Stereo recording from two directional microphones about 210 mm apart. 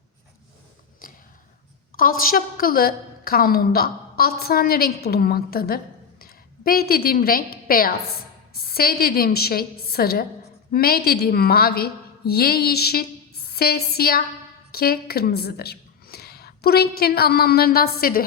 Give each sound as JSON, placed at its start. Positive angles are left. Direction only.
{"t": 1.0, "sound": "dog", "side_deg": 40}
{"t": 2.0, "sound": "a woman's voice", "side_deg": 45}